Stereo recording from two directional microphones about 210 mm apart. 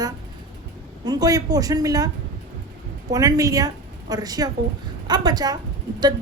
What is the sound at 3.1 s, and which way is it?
A woman's voice, 15° right (ahead or behind).